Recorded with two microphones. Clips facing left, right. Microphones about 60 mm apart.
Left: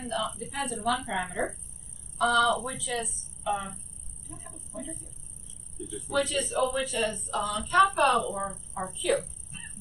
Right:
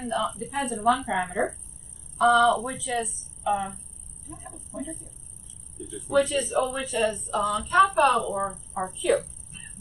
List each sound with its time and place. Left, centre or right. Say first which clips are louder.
0.0 s a woman's voice: right 4 dB; centre
0.5 s a woman's voice: right 7 dB; centre